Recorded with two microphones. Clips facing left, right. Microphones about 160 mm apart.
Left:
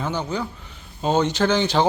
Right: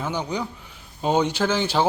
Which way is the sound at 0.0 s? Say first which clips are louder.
Left 1 dB; 10° right (ahead or behind).